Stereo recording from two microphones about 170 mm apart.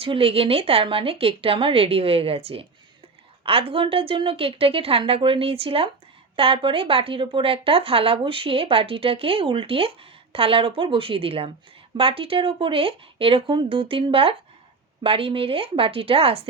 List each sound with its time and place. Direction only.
0.0 s speech: 35° right (ahead or behind)